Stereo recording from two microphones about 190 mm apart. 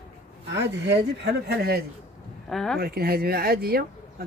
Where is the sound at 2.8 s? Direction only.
55° right (ahead or behind).